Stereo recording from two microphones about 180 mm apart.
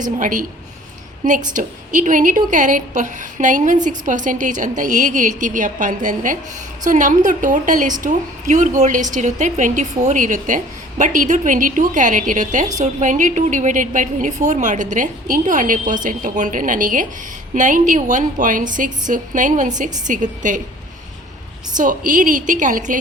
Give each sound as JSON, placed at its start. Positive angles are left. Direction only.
{"t": 0.0, "sound": "a woman's voice", "side_deg": -45}
{"t": 1.5, "sound": "a woman's voice", "side_deg": -45}
{"t": 21.8, "sound": "a woman's voice", "side_deg": -45}